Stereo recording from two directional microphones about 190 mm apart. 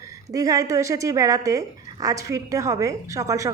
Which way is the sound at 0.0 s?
15° right (ahead or behind).